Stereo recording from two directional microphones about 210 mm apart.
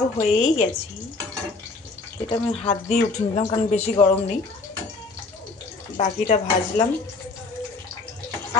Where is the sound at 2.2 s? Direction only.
25° left (ahead or behind).